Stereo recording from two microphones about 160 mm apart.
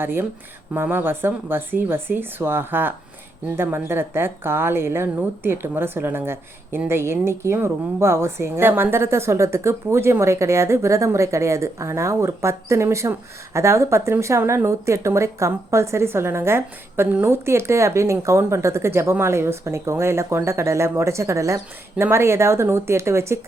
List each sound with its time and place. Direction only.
0.0 s speech: 15° right (ahead or behind)